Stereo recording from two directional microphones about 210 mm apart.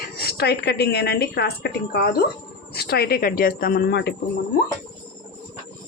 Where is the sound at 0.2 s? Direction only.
50° left (ahead or behind).